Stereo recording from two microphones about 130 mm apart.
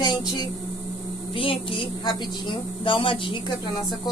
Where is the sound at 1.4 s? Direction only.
40° left (ahead or behind).